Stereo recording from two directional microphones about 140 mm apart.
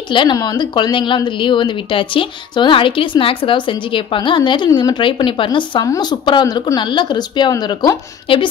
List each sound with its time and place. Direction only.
0.1 s a woman's voice: 35° left (ahead or behind)